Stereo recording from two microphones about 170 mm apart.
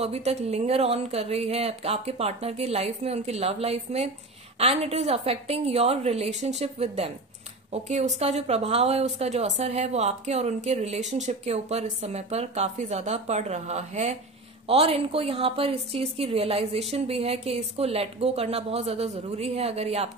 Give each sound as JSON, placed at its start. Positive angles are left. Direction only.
{"t": 0.0, "sound": "a woman's voice", "side_deg": -40}